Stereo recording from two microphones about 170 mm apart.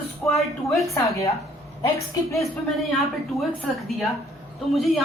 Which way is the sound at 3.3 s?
Centre (ahead or behind).